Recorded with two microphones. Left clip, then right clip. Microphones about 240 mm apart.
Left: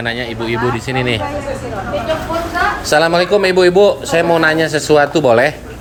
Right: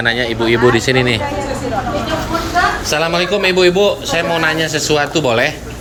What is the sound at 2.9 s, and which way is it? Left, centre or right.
A man's voice, left.